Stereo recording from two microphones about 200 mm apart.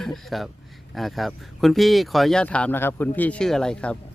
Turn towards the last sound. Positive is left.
turn(degrees=5)  # may be behind; listen again after turning